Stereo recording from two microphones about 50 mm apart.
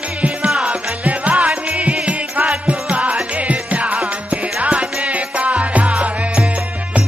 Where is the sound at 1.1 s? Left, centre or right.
Right.